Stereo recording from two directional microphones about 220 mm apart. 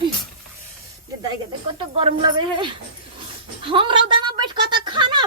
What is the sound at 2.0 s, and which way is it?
A woman's voice, 25° right (ahead or behind).